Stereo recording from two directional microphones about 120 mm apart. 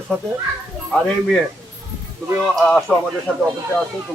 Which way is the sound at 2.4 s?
5° left (ahead or behind).